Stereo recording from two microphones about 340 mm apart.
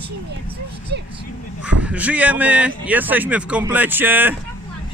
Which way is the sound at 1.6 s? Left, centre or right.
Centre.